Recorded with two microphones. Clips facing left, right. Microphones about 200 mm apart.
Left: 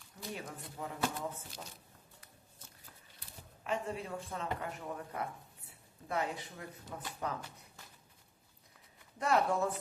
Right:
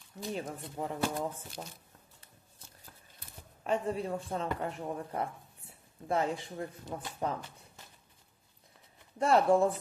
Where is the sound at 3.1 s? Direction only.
35° right (ahead or behind).